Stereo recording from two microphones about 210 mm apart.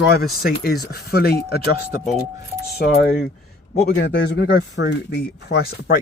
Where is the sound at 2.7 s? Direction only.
50° left (ahead or behind).